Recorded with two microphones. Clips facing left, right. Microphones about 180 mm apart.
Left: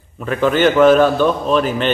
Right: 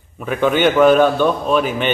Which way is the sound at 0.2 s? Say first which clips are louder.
Left 1 dB; 5° right (ahead or behind).